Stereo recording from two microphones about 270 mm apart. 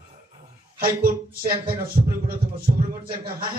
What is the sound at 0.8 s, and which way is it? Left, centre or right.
Speech, right.